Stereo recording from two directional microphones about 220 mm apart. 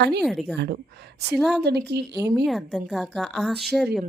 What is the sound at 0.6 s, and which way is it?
Speech, 50° right (ahead or behind).